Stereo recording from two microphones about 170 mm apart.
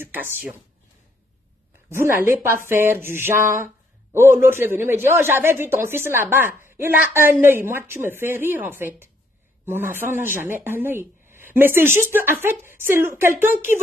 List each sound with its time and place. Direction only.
0.0 s speech: 10° right (ahead or behind)
1.9 s speech: 15° right (ahead or behind)
3.4 s speech: 50° right (ahead or behind)
4.4 s speech: 15° right (ahead or behind)